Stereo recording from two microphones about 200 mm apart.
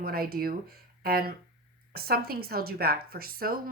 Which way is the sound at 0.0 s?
45° right (ahead or behind).